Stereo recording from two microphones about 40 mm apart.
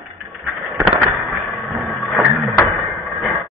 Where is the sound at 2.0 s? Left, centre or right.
Centre.